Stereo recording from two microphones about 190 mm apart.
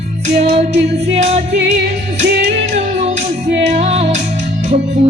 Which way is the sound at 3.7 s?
35° right (ahead or behind).